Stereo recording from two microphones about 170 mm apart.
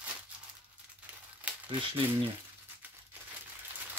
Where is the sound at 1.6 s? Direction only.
30° right (ahead or behind).